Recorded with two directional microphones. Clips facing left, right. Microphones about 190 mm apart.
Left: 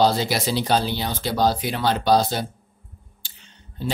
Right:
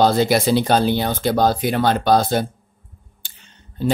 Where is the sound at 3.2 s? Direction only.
55° right (ahead or behind).